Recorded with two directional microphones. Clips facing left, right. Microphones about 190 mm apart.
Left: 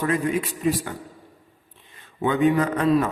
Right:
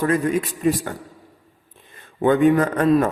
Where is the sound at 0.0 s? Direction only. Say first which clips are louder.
Right 3 dB; 45° right (ahead or behind).